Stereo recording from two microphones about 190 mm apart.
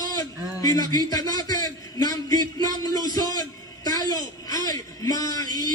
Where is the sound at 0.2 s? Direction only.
20° left (ahead or behind).